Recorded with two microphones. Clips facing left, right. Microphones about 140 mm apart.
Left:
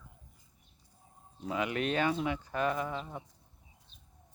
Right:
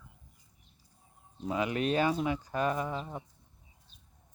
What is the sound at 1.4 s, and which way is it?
Speech, 30° right (ahead or behind).